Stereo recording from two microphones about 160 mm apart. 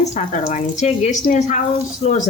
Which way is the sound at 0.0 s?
50° left (ahead or behind).